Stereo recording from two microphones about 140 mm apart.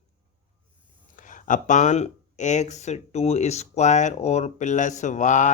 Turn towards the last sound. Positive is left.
turn(degrees=60)  # may be behind; listen again after turning